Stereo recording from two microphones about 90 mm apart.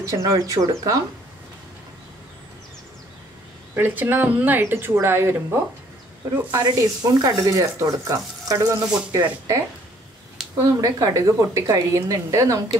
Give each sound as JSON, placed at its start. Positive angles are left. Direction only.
{"t": 0.0, "sound": "speech", "side_deg": -35}
{"t": 3.7, "sound": "speech", "side_deg": -20}
{"t": 6.3, "sound": "speech", "side_deg": -40}
{"t": 10.6, "sound": "speech", "side_deg": -40}